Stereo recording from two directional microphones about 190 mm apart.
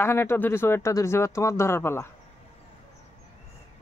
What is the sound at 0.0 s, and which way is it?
Speech, 15° left (ahead or behind).